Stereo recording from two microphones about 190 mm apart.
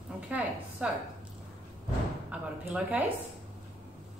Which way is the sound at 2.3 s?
5° right (ahead or behind).